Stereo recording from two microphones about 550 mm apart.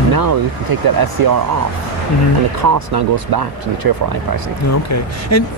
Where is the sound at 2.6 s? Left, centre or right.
Right.